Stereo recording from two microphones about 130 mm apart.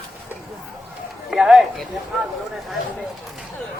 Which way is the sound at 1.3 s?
5° right (ahead or behind).